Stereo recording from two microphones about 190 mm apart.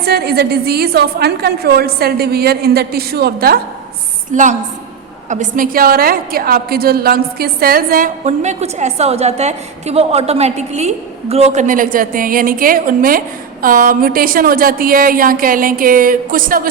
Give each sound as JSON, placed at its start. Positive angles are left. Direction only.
{"t": 0.0, "sound": "a woman's voice", "side_deg": -55}
{"t": 4.3, "sound": "a woman's voice", "side_deg": -40}